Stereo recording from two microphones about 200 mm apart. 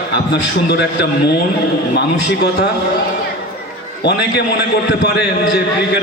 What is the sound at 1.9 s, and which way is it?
Speech, 55° left (ahead or behind).